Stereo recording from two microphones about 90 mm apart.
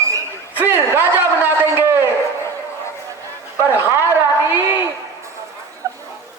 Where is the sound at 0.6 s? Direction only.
25° right (ahead or behind).